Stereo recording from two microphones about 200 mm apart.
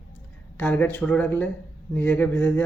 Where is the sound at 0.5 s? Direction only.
5° left (ahead or behind).